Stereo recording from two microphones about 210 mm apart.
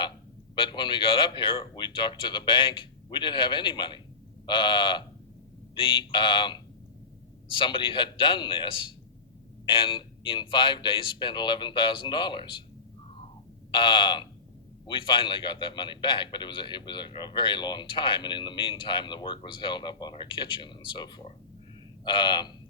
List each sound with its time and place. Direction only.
0.5 s a man's voice: 20° left (ahead or behind)
13.7 s a man's voice: 20° left (ahead or behind)